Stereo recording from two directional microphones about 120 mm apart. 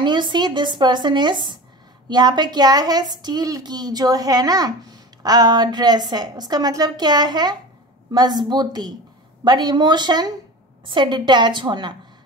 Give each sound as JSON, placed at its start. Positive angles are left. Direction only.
{"t": 0.0, "sound": "speech", "side_deg": -40}